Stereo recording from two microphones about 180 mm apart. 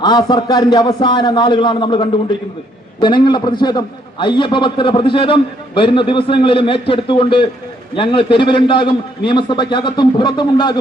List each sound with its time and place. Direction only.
0.0 s a man's voice: 25° left (ahead or behind)